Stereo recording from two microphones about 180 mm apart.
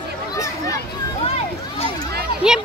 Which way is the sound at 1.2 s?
35° left (ahead or behind).